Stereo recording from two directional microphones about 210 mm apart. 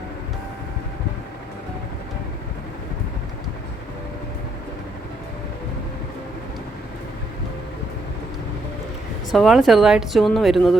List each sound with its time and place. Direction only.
9.3 s speech: centre (ahead or behind)